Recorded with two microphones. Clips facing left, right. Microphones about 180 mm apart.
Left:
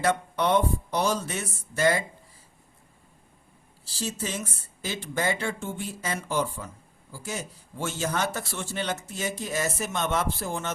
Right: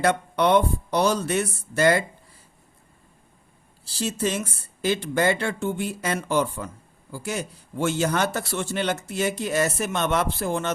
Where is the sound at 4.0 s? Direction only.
65° right (ahead or behind).